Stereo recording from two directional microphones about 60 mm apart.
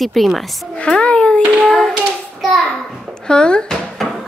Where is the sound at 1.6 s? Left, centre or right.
Centre.